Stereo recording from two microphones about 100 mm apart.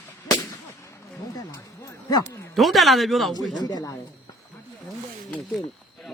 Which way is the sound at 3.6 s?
40° left (ahead or behind).